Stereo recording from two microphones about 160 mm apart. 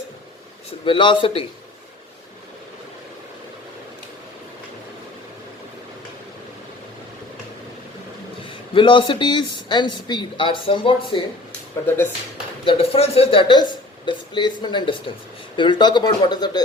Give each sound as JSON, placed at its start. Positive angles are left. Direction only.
{"t": 0.9, "sound": "speech", "side_deg": 30}
{"t": 8.7, "sound": "speech", "side_deg": 30}
{"t": 12.6, "sound": "speech", "side_deg": 35}